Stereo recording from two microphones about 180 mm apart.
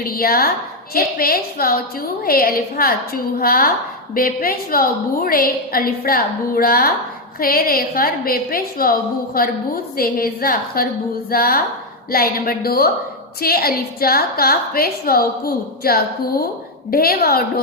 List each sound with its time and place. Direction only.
0.0 s a woman's voice: 55° left (ahead or behind)